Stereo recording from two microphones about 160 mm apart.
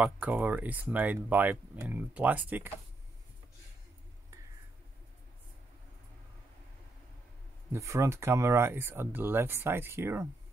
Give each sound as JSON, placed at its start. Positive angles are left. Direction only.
{"t": 0.0, "sound": "speech", "side_deg": -10}
{"t": 7.7, "sound": "speech", "side_deg": -20}